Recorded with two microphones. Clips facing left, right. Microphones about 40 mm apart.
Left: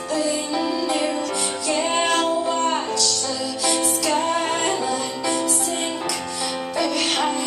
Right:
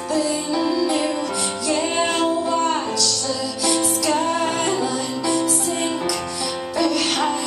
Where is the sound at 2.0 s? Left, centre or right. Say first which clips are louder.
Even; left.